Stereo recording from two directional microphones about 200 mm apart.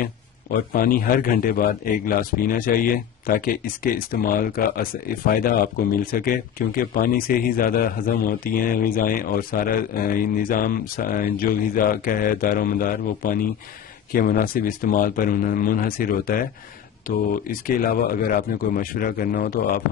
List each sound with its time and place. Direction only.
0.0 s a man's voice: 45° left (ahead or behind)